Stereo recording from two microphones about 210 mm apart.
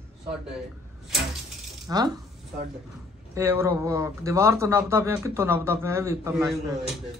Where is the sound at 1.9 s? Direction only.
15° right (ahead or behind).